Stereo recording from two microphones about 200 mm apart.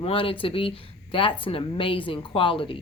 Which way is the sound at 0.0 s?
25° left (ahead or behind).